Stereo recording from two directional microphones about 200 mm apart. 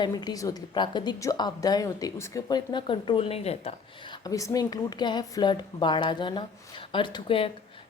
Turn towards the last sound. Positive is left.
turn(degrees=25)  # may be behind; listen again after turning